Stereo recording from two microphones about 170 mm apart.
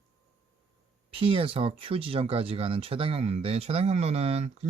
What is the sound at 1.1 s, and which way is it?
Speech, 35° right (ahead or behind).